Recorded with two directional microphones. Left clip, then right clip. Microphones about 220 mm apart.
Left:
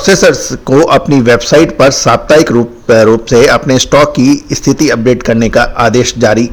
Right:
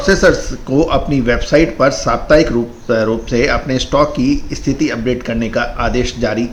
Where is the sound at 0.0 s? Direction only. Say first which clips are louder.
Left 5 dB; 45° left (ahead or behind).